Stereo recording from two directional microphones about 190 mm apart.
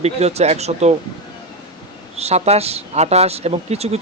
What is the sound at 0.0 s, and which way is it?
Speech, 35° right (ahead or behind).